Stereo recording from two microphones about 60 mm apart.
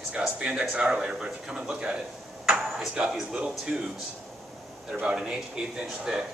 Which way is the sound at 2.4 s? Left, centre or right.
Centre.